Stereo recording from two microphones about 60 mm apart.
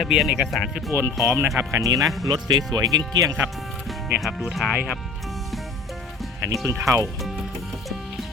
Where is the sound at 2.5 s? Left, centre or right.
Right.